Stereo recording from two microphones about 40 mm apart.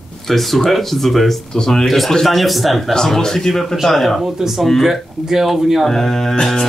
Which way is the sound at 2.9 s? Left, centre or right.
Centre.